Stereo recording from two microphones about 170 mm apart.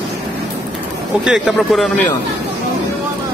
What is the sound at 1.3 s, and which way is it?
Speech, centre (ahead or behind).